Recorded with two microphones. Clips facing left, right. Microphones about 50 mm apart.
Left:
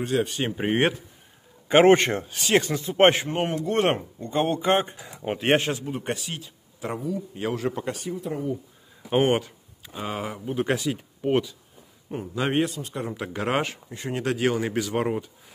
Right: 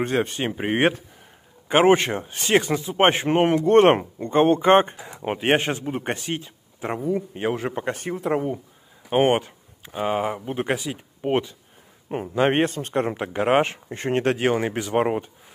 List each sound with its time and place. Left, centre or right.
0.0 s speech: right
1.7 s a man's voice: centre
2.5 s speech: centre
3.3 s speech: right
5.2 s speech: centre
5.7 s speech: right
8.1 s speech: right
9.2 s speech: right
10.7 s speech: centre
12.1 s speech: right
13.1 s speech: right
13.9 s speech: right
14.3 s speech: right